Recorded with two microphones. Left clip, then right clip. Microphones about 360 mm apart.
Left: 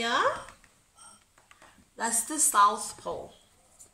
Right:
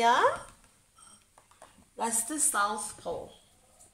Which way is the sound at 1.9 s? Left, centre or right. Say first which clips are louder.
Left 2 dB; centre.